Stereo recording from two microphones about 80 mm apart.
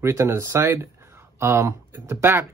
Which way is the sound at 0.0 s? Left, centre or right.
Right.